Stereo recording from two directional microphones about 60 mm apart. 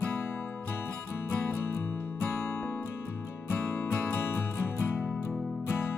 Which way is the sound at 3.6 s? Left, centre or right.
Left.